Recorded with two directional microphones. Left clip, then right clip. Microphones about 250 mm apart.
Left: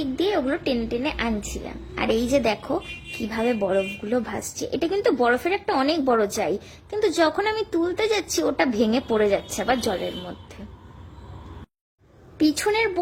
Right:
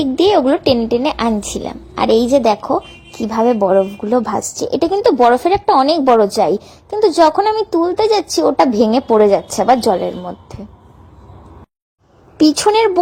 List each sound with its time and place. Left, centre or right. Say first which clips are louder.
0.2 s a woman's voice: right 12 dB; right
12.4 s a woman's voice: right 10 dB; right